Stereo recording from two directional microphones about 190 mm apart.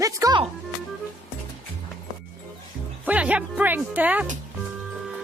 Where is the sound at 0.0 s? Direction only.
20° right (ahead or behind).